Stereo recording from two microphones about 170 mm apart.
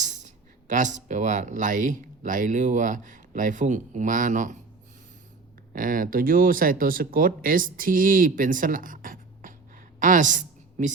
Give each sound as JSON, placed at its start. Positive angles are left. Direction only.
{"t": 0.0, "sound": "speech", "side_deg": -45}
{"t": 5.7, "sound": "speech", "side_deg": -55}
{"t": 10.0, "sound": "a sound", "side_deg": -50}